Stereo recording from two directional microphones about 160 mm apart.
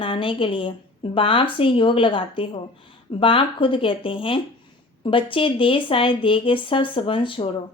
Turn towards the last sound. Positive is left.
turn(degrees=35)  # may be behind; listen again after turning